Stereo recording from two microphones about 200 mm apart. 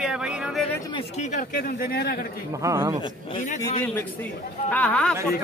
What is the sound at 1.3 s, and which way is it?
Speech, 45° left (ahead or behind).